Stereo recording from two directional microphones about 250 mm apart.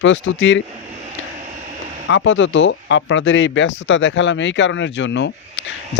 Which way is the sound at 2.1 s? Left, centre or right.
Left.